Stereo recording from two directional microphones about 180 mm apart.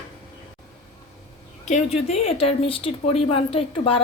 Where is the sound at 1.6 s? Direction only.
40° left (ahead or behind).